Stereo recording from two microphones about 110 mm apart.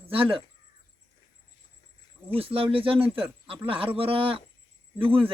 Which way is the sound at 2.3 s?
55° right (ahead or behind).